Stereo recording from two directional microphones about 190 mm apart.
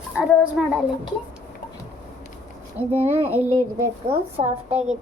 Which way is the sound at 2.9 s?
35° right (ahead or behind).